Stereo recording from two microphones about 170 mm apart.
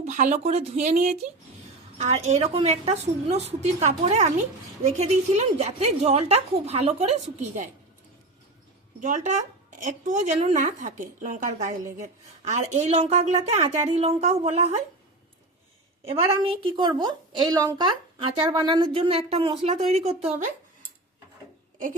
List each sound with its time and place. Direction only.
0.0 s a woman's voice: 45° right (ahead or behind)
9.0 s a woman's voice: 45° right (ahead or behind)
16.0 s a woman's voice: 30° right (ahead or behind)